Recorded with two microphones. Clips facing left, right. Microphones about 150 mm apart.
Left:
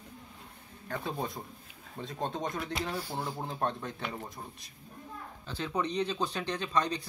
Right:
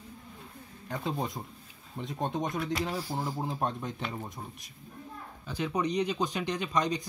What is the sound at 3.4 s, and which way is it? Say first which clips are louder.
Speech: right 1 dB; 15° right (ahead or behind).